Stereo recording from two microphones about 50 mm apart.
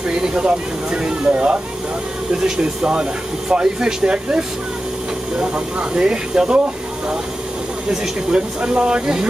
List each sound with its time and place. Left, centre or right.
0.2 s speech: right
7.9 s speech: centre